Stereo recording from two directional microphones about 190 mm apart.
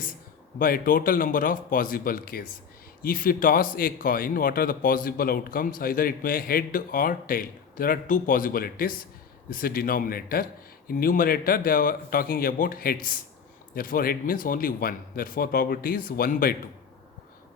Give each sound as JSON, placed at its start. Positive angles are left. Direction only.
{"t": 0.6, "sound": "a man's voice", "side_deg": 50}